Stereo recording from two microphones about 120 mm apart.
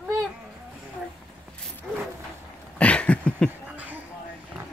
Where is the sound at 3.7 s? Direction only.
15° right (ahead or behind).